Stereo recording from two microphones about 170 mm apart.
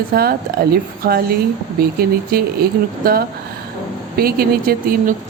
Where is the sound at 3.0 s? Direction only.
60° right (ahead or behind).